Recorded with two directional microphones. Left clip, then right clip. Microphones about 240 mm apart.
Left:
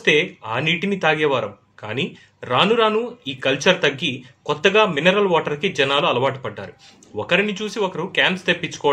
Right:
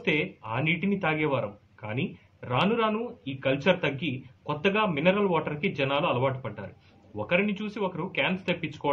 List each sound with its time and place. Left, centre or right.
0.0 s speech: left